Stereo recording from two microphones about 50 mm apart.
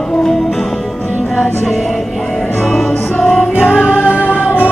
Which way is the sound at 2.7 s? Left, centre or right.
Centre.